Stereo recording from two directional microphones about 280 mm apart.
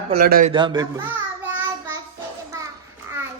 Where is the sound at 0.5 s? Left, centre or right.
Centre.